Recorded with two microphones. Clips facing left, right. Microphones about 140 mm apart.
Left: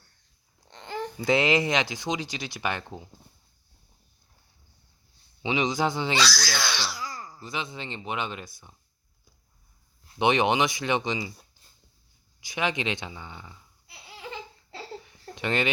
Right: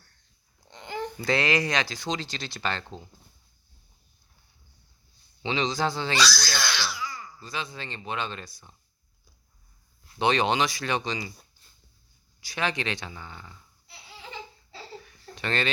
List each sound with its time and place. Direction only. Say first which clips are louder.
0.7 s a sound: even; centre (ahead or behind)
1.2 s speech: left 3 dB; 20° left (ahead or behind)
5.4 s speech: left 1 dB; 15° left (ahead or behind)
6.8 s throat clearing: even; 40° left (ahead or behind)
7.3 s speech: left 3 dB; 20° left (ahead or behind)
10.2 s speech: left 1 dB; 20° left (ahead or behind)
12.4 s speech: left 1 dB; 20° left (ahead or behind)
15.0 s a sound: left 2 dB; 15° left (ahead or behind)